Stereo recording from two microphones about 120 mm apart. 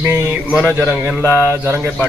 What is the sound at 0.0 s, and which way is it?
Speech, 20° right (ahead or behind).